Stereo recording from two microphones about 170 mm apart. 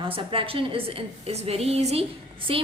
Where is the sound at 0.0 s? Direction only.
30° right (ahead or behind).